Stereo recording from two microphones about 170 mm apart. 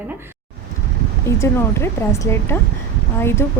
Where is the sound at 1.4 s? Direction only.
15° left (ahead or behind).